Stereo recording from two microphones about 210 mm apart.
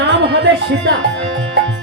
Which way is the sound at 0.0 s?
55° right (ahead or behind).